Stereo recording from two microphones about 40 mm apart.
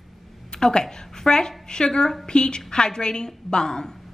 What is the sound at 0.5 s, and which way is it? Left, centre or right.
A woman's voice, centre.